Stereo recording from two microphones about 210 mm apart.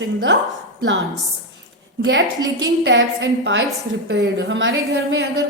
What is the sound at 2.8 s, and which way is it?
A woman's voice, 55° right (ahead or behind).